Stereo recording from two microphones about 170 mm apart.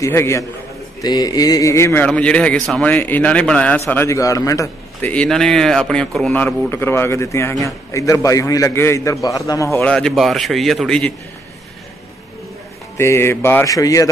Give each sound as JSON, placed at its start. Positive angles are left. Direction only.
{"t": 0.0, "sound": "a man's voice", "side_deg": 15}
{"t": 1.0, "sound": "a sound", "side_deg": 20}
{"t": 2.0, "sound": "a man's voice", "side_deg": 5}
{"t": 5.1, "sound": "a man's voice", "side_deg": 5}
{"t": 9.8, "sound": "a man's voice", "side_deg": 5}
{"t": 12.9, "sound": "a man's voice", "side_deg": 15}